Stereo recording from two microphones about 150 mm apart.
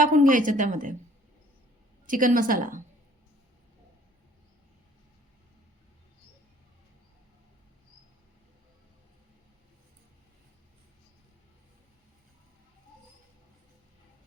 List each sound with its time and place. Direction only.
0.0 s speech: 60° right (ahead or behind)
2.0 s speech: 65° right (ahead or behind)